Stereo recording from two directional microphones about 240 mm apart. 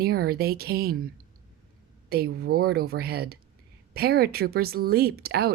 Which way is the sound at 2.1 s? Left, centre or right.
Right.